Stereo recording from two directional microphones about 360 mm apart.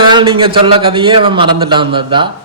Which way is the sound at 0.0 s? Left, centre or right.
Centre.